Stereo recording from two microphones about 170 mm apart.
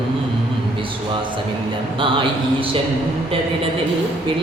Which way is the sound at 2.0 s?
30° right (ahead or behind).